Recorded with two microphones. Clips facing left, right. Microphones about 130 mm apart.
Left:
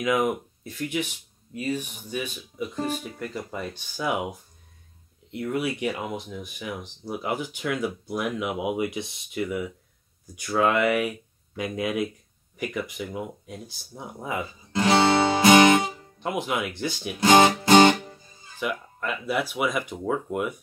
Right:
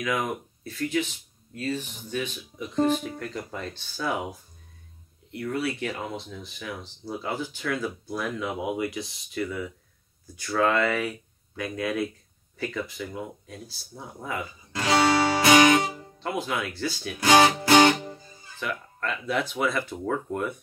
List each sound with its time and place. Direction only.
0.0 s speech: 20° left (ahead or behind)
12.5 s a sound: 15° left (ahead or behind)
16.2 s speech: 20° left (ahead or behind)